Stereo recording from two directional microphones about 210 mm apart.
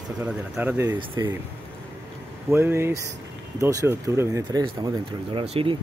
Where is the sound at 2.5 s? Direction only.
10° right (ahead or behind).